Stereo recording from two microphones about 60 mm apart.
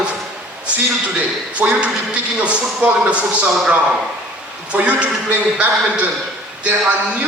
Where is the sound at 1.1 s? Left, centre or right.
Centre.